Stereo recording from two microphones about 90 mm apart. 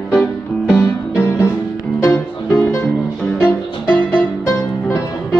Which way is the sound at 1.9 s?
35° left (ahead or behind).